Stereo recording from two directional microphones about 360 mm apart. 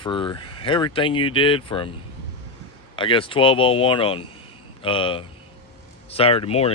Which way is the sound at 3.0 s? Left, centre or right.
Centre.